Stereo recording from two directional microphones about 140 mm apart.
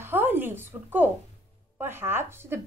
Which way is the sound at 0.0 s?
15° right (ahead or behind).